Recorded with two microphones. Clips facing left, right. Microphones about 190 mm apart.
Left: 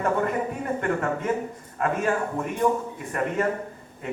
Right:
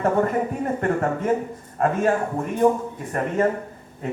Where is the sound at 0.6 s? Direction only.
40° right (ahead or behind).